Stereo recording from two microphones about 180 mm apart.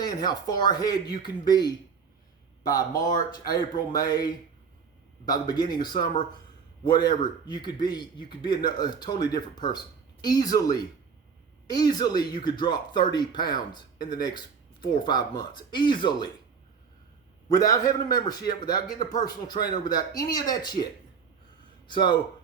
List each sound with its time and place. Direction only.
0.0 s speech: 20° left (ahead or behind)
17.5 s speech: 20° left (ahead or behind)
21.8 s speech: 25° left (ahead or behind)